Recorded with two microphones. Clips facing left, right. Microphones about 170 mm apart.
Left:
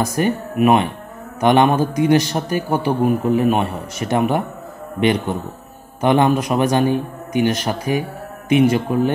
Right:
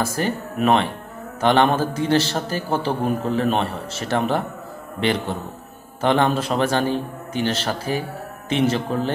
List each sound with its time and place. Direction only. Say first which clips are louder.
0.0 s a man's voice: left 4 dB; 15° left (ahead or behind)
5.9 s a man's voice: left 4 dB; 15° left (ahead or behind)